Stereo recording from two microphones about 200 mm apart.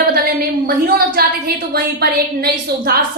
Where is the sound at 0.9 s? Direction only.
50° right (ahead or behind).